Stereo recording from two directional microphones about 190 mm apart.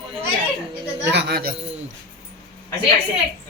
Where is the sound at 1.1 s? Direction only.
60° right (ahead or behind).